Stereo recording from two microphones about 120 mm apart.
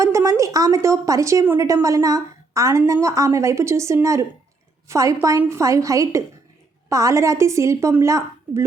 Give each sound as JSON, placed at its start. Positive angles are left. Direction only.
{"t": 0.0, "sound": "a woman's voice", "side_deg": -25}